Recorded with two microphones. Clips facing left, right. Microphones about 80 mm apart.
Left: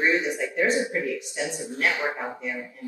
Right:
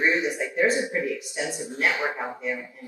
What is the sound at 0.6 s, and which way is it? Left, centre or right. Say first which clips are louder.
Speech: right 1 dB; left.